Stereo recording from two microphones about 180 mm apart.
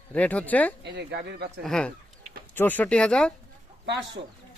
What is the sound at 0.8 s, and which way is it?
Speech, 65° right (ahead or behind).